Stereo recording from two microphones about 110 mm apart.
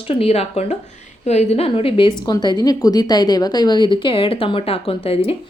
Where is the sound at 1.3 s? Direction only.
80° left.